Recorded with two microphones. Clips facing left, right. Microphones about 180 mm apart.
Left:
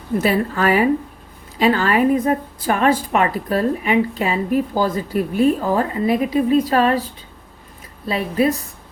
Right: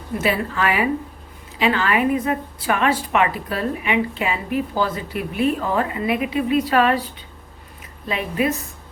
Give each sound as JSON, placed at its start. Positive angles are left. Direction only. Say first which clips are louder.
{"t": 0.2, "sound": "a woman's voice", "louder": "left 3 dB", "side_deg": 40}
{"t": 8.0, "sound": "a woman's voice", "louder": "left 4 dB", "side_deg": 35}